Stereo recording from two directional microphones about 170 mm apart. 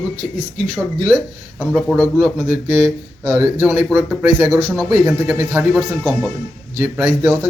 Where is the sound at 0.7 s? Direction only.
10° right (ahead or behind).